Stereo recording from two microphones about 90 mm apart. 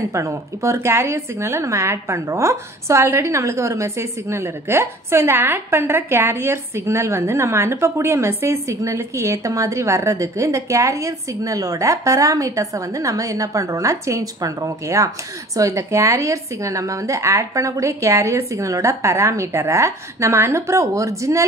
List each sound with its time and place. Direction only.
0.1 s speech: 35° right (ahead or behind)